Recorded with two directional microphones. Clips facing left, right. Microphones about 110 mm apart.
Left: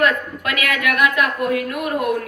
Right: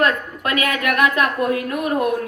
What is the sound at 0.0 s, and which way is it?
A woman's voice, 30° right (ahead or behind).